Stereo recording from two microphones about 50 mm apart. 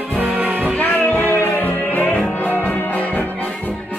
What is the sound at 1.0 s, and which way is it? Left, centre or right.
Music, left.